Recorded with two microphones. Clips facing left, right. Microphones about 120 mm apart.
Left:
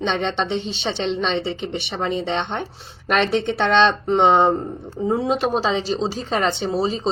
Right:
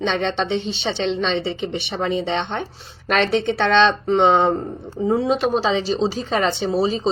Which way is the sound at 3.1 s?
10° left (ahead or behind).